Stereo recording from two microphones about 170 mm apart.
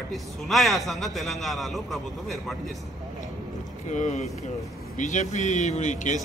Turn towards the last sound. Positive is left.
turn(degrees=45)  # may be behind; listen again after turning